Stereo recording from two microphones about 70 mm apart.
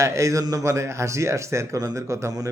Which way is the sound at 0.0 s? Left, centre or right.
Right.